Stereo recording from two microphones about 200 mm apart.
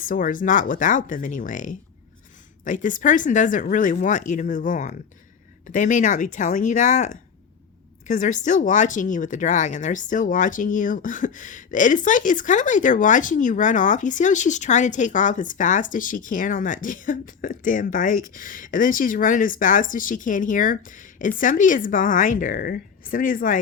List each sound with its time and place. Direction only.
0.0 s speech: 40° left (ahead or behind)